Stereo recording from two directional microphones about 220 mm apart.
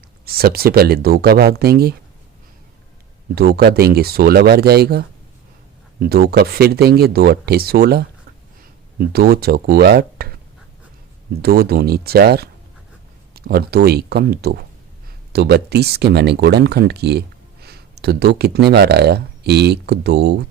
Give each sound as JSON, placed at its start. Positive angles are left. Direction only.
{"t": 0.3, "sound": "speech", "side_deg": -45}
{"t": 3.3, "sound": "speech", "side_deg": -45}
{"t": 11.4, "sound": "speech", "side_deg": -45}